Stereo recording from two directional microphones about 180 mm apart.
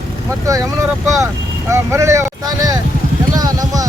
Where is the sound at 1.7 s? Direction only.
15° right (ahead or behind).